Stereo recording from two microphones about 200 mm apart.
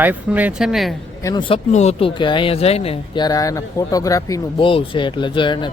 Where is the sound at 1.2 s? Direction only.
20° left (ahead or behind).